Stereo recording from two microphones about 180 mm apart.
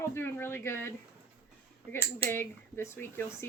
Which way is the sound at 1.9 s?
10° left (ahead or behind).